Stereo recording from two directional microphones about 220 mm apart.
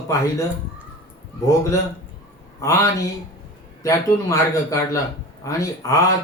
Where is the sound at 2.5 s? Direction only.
15° left (ahead or behind).